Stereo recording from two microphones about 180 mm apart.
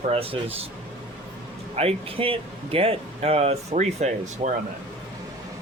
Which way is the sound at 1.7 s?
35° right (ahead or behind).